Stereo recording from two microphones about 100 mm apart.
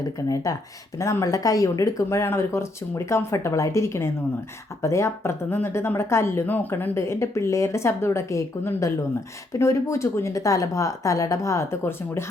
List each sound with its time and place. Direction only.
0.2 s a woman's voice: 30° left (ahead or behind)